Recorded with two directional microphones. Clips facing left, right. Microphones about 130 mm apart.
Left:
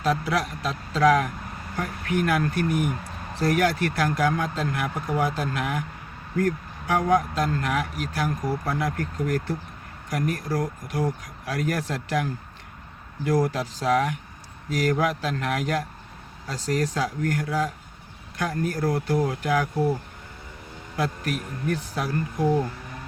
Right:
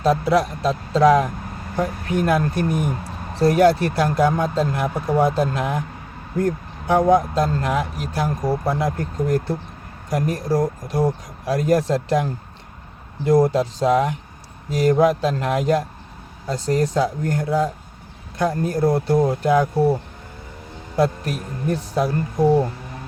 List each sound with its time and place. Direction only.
0.0 s speech: 30° right (ahead or behind)
6.3 s vehicle: 25° right (ahead or behind)
7.1 s speech: 25° right (ahead or behind)